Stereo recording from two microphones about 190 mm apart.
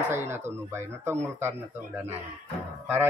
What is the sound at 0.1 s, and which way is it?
Speech, 10° right (ahead or behind).